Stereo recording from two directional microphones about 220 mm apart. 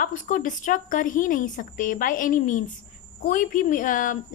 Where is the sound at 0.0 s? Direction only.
35° left (ahead or behind).